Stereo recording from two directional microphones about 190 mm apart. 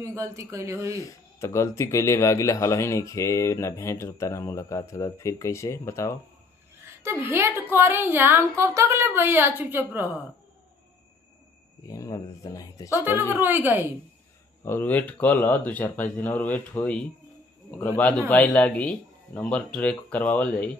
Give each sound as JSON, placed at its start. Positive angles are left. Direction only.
{"t": 0.0, "sound": "a woman's voice", "side_deg": -15}
{"t": 1.0, "sound": "speech", "side_deg": 15}
{"t": 6.8, "sound": "a woman's voice", "side_deg": -15}
{"t": 11.9, "sound": "speech", "side_deg": 20}
{"t": 13.4, "sound": "a woman's voice", "side_deg": -10}
{"t": 14.6, "sound": "speech", "side_deg": 10}